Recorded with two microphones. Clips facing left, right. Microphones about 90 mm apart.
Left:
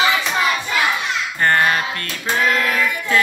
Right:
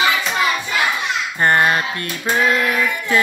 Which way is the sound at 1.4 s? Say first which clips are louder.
Right 1 dB; 15° right (ahead or behind).